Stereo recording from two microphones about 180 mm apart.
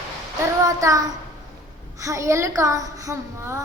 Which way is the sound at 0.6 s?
20° right (ahead or behind).